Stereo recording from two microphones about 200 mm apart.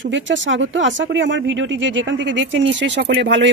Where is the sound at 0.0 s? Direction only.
70° right (ahead or behind).